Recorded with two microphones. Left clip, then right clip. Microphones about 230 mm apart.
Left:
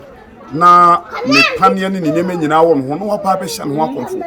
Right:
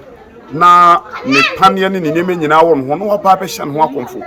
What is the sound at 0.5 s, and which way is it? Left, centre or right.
Speech, centre.